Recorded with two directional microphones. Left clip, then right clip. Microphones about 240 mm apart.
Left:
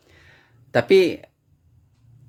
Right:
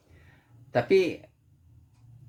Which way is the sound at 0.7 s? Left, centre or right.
Left.